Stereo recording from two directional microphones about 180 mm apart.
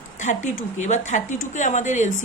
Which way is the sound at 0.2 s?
40° left (ahead or behind).